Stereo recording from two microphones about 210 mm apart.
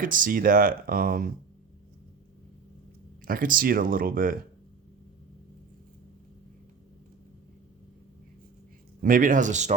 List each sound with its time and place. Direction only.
0.0 s speech: 40° right (ahead or behind)
3.2 s speech: 40° right (ahead or behind)
9.0 s speech: 40° right (ahead or behind)